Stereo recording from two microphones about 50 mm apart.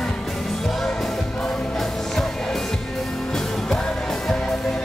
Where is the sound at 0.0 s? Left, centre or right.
Centre.